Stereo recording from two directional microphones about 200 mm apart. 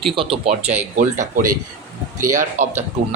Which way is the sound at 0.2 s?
30° right (ahead or behind).